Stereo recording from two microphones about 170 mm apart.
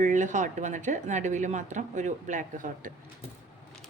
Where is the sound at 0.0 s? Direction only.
45° right (ahead or behind).